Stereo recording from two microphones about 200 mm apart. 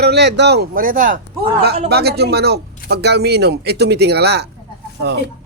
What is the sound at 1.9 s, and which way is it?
Speech, 55° right (ahead or behind).